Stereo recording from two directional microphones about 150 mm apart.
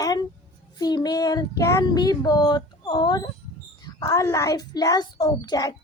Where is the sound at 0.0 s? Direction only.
25° left (ahead or behind).